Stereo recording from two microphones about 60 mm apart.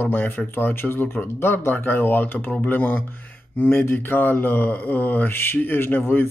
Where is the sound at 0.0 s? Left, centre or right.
Left.